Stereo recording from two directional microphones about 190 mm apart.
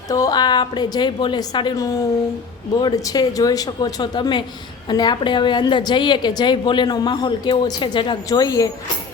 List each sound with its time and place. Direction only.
0.1 s a woman's voice: 20° left (ahead or behind)